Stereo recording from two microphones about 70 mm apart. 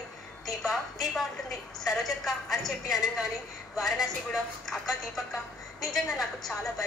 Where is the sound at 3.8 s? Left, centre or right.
Centre.